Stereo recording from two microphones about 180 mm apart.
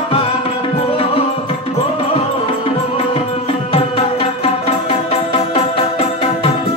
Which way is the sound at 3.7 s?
35° left (ahead or behind).